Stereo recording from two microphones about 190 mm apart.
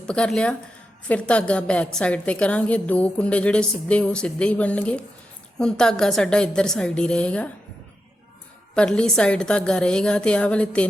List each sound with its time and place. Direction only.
0.0 s a woman's voice: 5° left (ahead or behind)
8.7 s a woman's voice: 5° left (ahead or behind)